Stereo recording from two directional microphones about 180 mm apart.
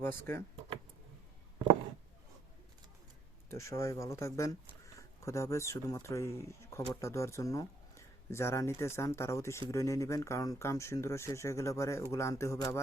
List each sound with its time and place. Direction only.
0.0 s speech: 10° left (ahead or behind)
3.5 s speech: 15° left (ahead or behind)